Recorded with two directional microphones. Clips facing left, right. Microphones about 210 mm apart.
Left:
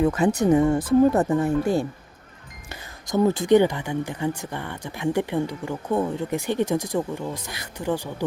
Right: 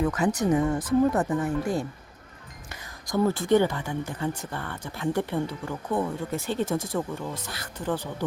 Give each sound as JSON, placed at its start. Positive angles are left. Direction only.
{"t": 0.0, "sound": "speech", "side_deg": 25}